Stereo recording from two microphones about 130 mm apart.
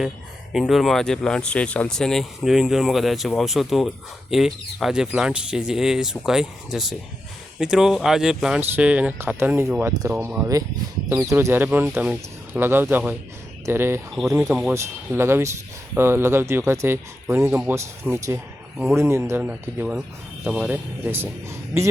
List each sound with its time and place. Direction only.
0.7 s speech: centre (ahead or behind); by 21.8 s 20° right (ahead or behind)